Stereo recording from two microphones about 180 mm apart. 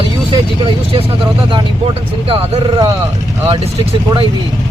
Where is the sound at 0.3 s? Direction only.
30° right (ahead or behind).